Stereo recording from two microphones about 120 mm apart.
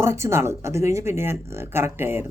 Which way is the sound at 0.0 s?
20° right (ahead or behind).